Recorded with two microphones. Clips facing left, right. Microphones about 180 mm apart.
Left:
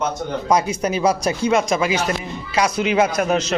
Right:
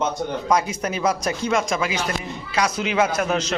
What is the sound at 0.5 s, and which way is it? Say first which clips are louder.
Speech: left 4 dB; 15° left (ahead or behind).